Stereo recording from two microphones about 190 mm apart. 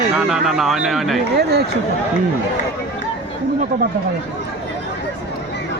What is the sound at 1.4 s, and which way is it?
Speech, 60° right (ahead or behind).